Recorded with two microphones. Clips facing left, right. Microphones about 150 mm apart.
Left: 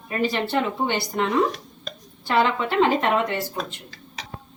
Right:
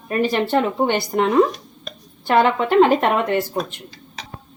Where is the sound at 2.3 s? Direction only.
55° right (ahead or behind).